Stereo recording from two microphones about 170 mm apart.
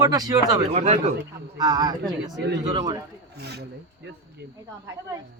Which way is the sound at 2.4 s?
85° right.